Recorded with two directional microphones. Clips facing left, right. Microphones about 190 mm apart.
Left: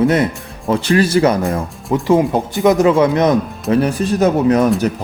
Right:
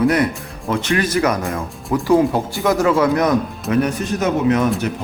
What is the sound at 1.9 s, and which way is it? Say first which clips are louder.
Speech: left 1 dB; 20° left (ahead or behind).